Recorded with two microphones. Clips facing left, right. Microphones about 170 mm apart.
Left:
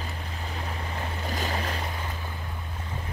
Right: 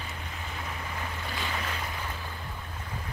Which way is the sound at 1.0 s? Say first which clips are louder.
Left 6 dB; 40° left (ahead or behind).